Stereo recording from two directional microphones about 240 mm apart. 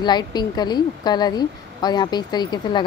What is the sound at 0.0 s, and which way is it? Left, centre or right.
A woman's voice, centre.